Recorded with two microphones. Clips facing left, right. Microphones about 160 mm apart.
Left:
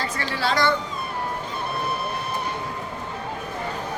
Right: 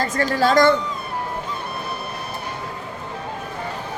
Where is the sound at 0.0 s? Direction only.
45° right (ahead or behind).